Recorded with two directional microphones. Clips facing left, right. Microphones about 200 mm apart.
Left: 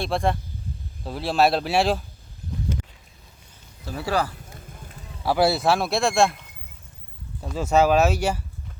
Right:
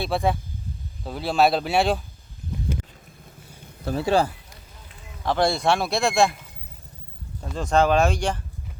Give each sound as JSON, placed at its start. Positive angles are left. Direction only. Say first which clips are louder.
{"t": 0.0, "sound": "speech", "louder": "even", "side_deg": 0}
{"t": 3.9, "sound": "speech", "louder": "right 4 dB", "side_deg": -25}
{"t": 5.2, "sound": "speech", "louder": "left 1 dB", "side_deg": 5}
{"t": 7.4, "sound": "speech", "louder": "left 1 dB", "side_deg": 5}